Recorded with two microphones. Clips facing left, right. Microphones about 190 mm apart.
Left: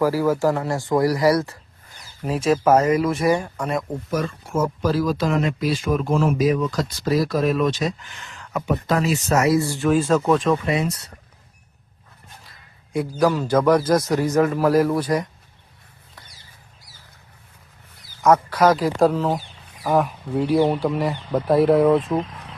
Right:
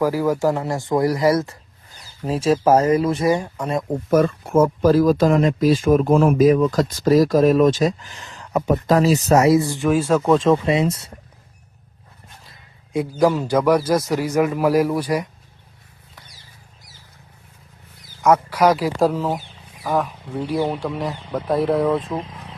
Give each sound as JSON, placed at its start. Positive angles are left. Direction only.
{"t": 0.0, "sound": "speech", "side_deg": -15}
{"t": 4.1, "sound": "speech", "side_deg": -55}
{"t": 9.6, "sound": "a man's voice", "side_deg": -15}
{"t": 10.3, "sound": "speech", "side_deg": -25}
{"t": 12.5, "sound": "a sound", "side_deg": -20}
{"t": 13.1, "sound": "a man's voice", "side_deg": -20}
{"t": 18.2, "sound": "a man's voice", "side_deg": -10}